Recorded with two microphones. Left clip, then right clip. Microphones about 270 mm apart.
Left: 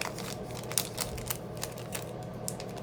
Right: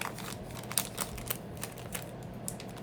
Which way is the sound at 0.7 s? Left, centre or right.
Centre.